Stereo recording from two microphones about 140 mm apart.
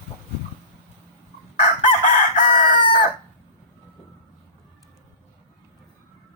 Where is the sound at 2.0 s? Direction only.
80° left.